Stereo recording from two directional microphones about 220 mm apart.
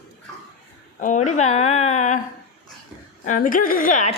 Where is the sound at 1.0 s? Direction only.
35° left (ahead or behind).